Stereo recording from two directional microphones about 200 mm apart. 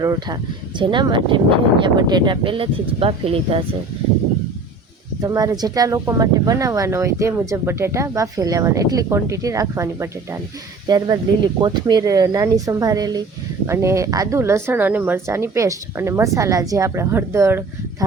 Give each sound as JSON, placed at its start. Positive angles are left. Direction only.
{"t": 0.0, "sound": "speech", "side_deg": -20}
{"t": 5.2, "sound": "speech", "side_deg": -15}